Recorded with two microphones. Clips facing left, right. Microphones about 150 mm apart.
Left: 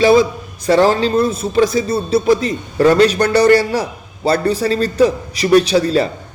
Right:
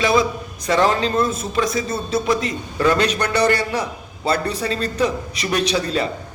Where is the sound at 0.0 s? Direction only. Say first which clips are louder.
Left 7 dB; 30° left (ahead or behind).